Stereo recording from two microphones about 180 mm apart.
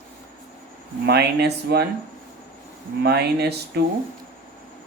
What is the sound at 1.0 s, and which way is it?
Speech, 65° right (ahead or behind).